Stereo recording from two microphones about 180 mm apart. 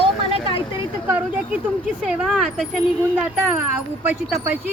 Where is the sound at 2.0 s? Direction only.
Centre (ahead or behind).